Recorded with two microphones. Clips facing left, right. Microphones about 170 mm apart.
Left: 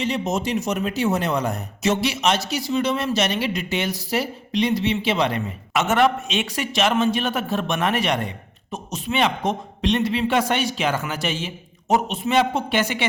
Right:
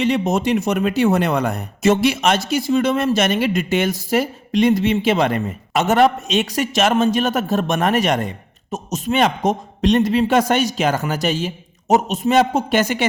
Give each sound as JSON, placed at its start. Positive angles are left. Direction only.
{"t": 0.0, "sound": "speech", "side_deg": -60}